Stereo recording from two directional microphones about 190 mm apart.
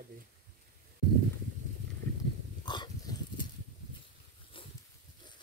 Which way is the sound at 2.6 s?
20° left (ahead or behind).